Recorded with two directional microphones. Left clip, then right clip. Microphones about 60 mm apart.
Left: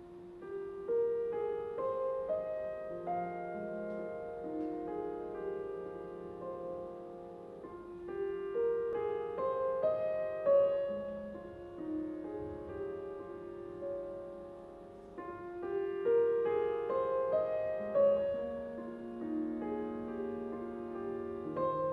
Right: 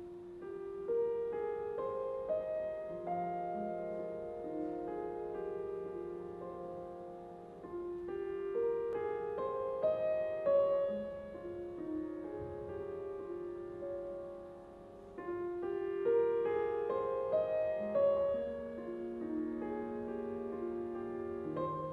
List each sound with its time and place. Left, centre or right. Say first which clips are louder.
1.3 s music: left 1 dB; centre
8.1 s music: left 3 dB; centre
9.0 s music: left 2 dB; centre
15.6 s music: left 3 dB; centre